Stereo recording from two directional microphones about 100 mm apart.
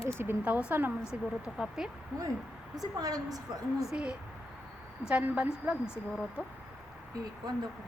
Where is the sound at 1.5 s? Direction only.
5° right (ahead or behind).